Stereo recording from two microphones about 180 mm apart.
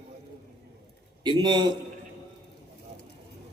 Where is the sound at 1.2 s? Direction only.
25° right (ahead or behind).